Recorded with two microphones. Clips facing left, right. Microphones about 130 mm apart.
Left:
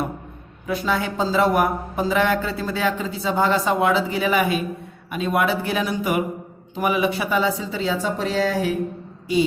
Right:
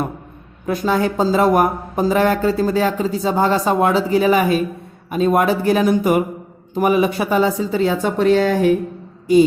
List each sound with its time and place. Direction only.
0.7 s a woman's voice: 45° right (ahead or behind)